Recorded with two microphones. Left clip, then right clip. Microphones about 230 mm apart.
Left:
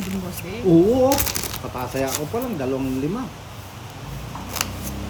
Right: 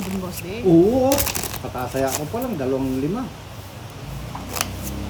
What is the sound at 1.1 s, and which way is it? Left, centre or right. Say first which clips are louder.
A man's voice: right 1 dB; centre.